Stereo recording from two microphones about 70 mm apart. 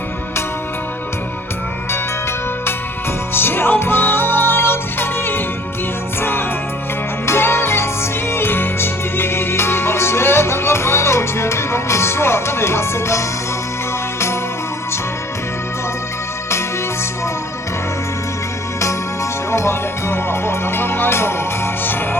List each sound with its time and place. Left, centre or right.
3.3 s music: left
19.5 s music: left